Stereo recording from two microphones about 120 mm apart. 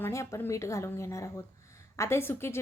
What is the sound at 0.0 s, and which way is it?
A woman's voice, 25° left (ahead or behind).